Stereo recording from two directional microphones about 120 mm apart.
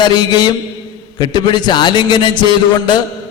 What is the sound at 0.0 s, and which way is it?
A man's voice, 35° left (ahead or behind).